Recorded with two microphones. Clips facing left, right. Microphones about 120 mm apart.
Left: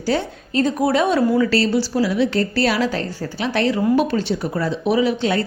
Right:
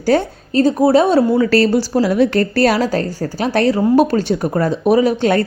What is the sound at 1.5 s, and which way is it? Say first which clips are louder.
Speech: right 5 dB; 50° right (ahead or behind).